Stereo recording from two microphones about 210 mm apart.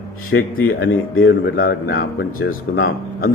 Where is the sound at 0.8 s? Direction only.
70° left (ahead or behind).